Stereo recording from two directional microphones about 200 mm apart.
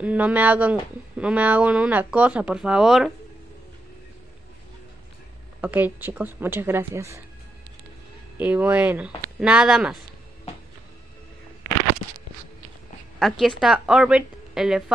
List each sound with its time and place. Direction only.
0.0 s speech: 5° right (ahead or behind)
5.6 s speech: 10° right (ahead or behind)
8.4 s speech: 10° right (ahead or behind)
13.2 s a woman's voice: centre (ahead or behind)